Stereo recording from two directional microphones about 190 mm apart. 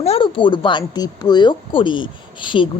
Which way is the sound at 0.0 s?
30° left (ahead or behind).